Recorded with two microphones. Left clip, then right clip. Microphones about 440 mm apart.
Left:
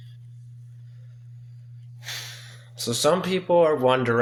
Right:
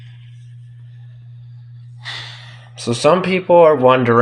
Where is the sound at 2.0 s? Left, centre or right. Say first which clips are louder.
Right 6 dB; left.